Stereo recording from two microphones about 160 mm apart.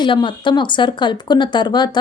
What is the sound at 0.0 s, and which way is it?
Speech, 30° left (ahead or behind).